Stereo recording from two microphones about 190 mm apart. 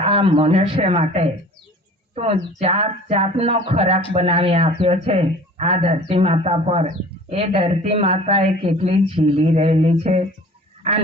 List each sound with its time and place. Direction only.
0.0 s speech: 30° right (ahead or behind)
2.6 s speech: 30° right (ahead or behind)